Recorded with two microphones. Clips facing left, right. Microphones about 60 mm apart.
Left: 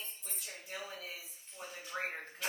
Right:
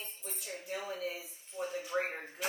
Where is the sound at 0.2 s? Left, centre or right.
Centre.